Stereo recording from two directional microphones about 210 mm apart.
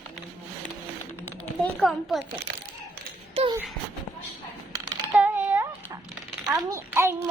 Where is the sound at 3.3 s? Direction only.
30° right (ahead or behind).